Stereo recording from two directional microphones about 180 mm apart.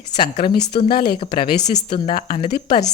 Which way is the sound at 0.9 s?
60° left (ahead or behind).